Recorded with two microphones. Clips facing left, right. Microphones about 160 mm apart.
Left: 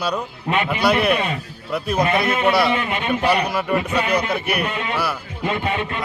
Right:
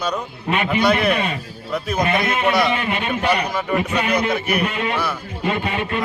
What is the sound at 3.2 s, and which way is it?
Speech, 30° left (ahead or behind).